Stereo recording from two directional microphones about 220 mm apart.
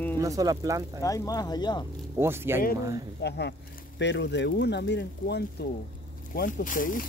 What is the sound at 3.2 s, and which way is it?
Speech, 50° left (ahead or behind).